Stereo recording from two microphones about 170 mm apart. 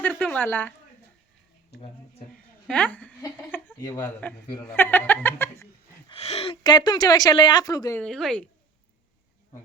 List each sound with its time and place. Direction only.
0.2 s speech: 10° left (ahead or behind)
2.6 s a woman's voice: 10° left (ahead or behind)
3.5 s a sound: 15° left (ahead or behind)
4.0 s speech: 10° left (ahead or behind)
6.1 s a woman's voice: 35° left (ahead or behind); by 7.9 s 20° left (ahead or behind)
7.9 s speech: 5° left (ahead or behind)